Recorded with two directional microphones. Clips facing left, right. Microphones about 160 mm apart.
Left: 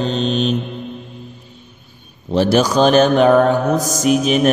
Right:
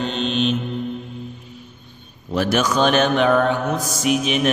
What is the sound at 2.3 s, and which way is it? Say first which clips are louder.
Speech: left 5 dB; 30° left (ahead or behind).